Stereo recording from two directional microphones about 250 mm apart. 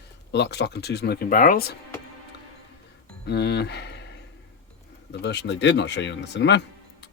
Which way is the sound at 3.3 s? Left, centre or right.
Left.